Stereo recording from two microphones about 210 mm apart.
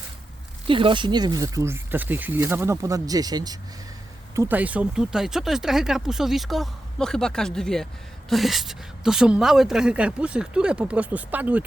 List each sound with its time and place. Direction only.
0.7 s speech: 25° right (ahead or behind)
4.4 s speech: 10° right (ahead or behind)